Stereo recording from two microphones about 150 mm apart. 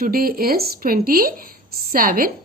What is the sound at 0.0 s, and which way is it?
A woman's voice, 75° right (ahead or behind).